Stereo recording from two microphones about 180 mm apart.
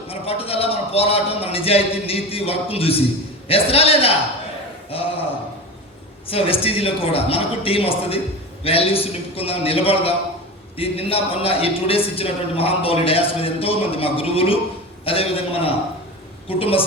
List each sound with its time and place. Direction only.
0.1 s a man's voice: 35° left (ahead or behind)
6.2 s a man's voice: 30° left (ahead or behind)